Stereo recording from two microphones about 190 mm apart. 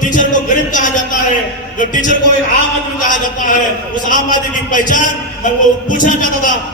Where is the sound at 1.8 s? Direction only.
40° left (ahead or behind).